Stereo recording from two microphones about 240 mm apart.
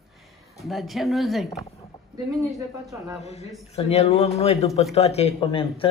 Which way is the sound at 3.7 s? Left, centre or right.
Left.